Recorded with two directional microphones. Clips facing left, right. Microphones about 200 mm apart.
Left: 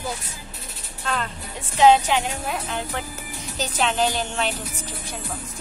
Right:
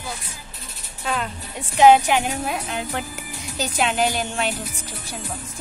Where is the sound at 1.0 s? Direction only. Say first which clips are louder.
Right 1 dB; 10° right (ahead or behind).